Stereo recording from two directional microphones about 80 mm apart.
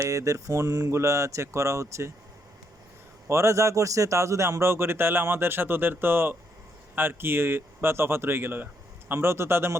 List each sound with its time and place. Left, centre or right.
0.1 s a man's voice: right
3.2 s a man's voice: right